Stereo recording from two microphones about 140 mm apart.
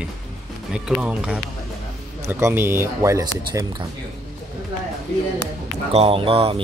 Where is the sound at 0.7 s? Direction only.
5° right (ahead or behind); by 3.7 s 20° right (ahead or behind).